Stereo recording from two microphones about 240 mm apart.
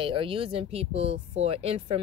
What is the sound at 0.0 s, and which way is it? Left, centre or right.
Speech, right.